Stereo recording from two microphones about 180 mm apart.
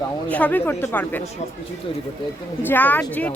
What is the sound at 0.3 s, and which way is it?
Speech, 10° left (ahead or behind).